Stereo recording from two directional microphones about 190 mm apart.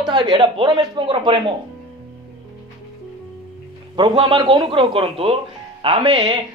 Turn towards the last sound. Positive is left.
turn(degrees=-25)  # may be behind; listen again after turning